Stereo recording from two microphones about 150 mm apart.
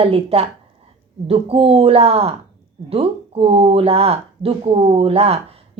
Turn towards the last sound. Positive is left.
turn(degrees=-40)  # may be behind; listen again after turning